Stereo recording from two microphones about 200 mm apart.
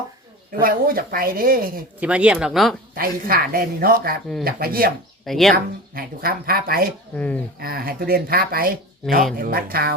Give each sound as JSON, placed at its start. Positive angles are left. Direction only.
{"t": 0.6, "sound": "speech", "side_deg": -45}
{"t": 2.0, "sound": "speech", "side_deg": -5}
{"t": 2.9, "sound": "speech", "side_deg": -50}
{"t": 5.2, "sound": "speech", "side_deg": 0}
{"t": 5.5, "sound": "speech", "side_deg": -50}